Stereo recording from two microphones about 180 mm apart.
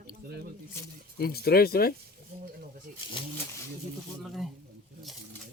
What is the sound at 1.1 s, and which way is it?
Speech, 60° left (ahead or behind).